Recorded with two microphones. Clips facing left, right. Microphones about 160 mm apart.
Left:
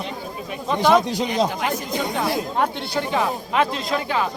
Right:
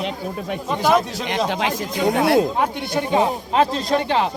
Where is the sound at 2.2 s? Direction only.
65° right (ahead or behind).